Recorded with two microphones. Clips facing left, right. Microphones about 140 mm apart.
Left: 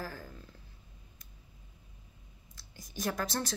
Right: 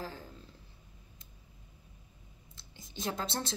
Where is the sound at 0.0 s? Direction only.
25° right (ahead or behind).